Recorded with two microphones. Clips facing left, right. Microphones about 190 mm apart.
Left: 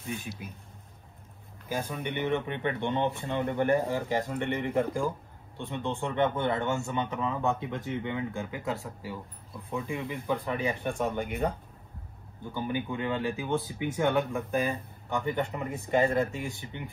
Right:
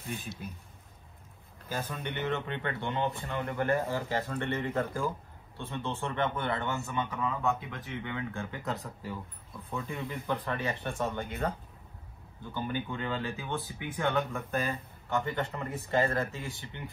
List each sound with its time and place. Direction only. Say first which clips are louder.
1.7 s speech: left 3 dB; 15° left (ahead or behind)
12.5 s speech: left 3 dB; 15° left (ahead or behind)